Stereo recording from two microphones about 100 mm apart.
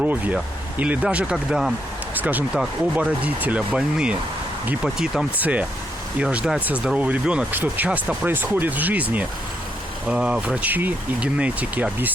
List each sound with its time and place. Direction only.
0.0 s speech: 15° right (ahead or behind)
2.1 s speech: 15° right (ahead or behind)